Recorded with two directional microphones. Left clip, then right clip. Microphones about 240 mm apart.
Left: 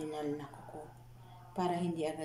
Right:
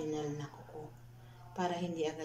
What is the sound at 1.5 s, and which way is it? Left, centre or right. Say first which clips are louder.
Speech: left 1 dB; left.